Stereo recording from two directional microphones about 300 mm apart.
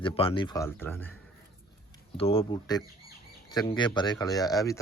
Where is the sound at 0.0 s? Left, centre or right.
Centre.